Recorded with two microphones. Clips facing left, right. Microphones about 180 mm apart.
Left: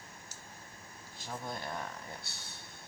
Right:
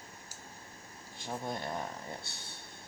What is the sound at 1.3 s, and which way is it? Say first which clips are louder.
Speech: right 3 dB; 20° right (ahead or behind).